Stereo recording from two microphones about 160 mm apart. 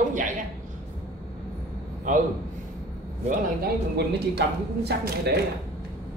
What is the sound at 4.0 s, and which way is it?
Speech, 90° right.